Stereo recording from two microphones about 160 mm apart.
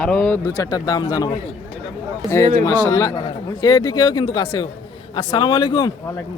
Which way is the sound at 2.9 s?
20° left (ahead or behind).